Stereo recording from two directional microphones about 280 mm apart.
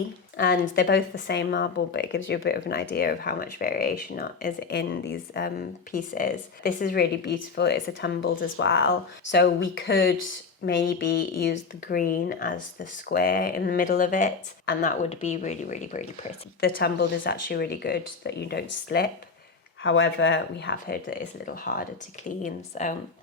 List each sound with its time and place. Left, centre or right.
0.3 s a woman's voice: left